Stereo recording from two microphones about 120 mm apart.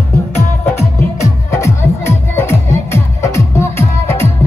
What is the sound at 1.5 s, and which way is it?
Music, 25° left (ahead or behind).